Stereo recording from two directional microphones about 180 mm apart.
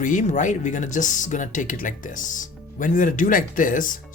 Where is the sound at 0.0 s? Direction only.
45° left (ahead or behind).